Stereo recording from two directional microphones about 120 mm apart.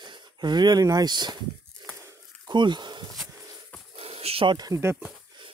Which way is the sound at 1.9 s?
25° right (ahead or behind).